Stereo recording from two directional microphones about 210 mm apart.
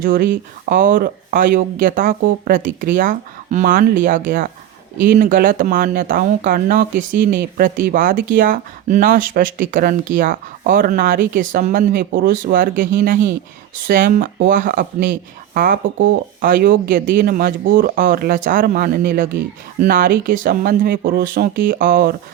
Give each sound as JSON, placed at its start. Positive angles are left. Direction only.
{"t": 0.0, "sound": "speech", "side_deg": -40}